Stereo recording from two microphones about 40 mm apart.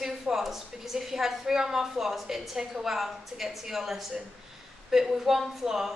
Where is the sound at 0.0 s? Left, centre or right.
Centre.